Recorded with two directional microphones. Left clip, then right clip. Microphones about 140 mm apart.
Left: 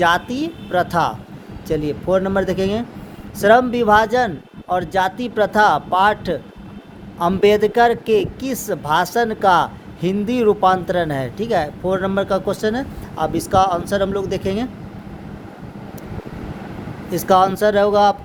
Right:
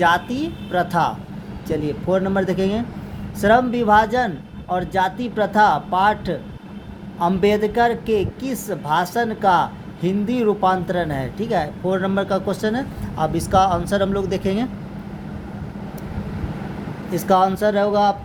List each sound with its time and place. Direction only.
0.0 s a woman's voice: 30° left (ahead or behind)
17.1 s speech: 35° left (ahead or behind)